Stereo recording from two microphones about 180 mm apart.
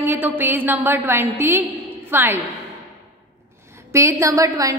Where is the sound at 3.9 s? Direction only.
15° right (ahead or behind).